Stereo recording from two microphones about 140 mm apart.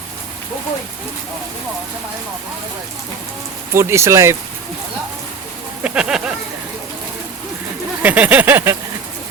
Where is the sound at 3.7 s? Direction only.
20° right (ahead or behind).